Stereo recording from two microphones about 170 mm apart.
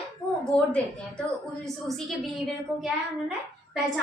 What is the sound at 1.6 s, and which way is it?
A woman's voice, centre (ahead or behind).